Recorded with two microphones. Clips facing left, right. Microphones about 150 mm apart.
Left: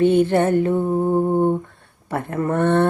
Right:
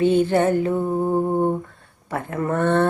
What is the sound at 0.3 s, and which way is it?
Speech, 5° right (ahead or behind).